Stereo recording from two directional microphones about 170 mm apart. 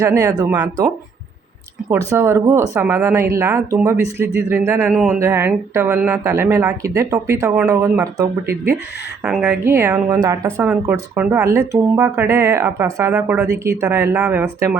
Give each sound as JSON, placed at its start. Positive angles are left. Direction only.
{"t": 0.0, "sound": "speech", "side_deg": -20}
{"t": 1.9, "sound": "speech", "side_deg": -15}
{"t": 4.9, "sound": "speech", "side_deg": -5}
{"t": 5.2, "sound": "speech", "side_deg": -15}
{"t": 9.2, "sound": "speech", "side_deg": -5}
{"t": 9.6, "sound": "speech", "side_deg": -15}